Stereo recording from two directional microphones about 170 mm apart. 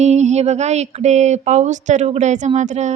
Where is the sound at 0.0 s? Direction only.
40° right (ahead or behind).